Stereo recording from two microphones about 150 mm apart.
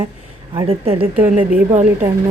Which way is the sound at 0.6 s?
40° right (ahead or behind).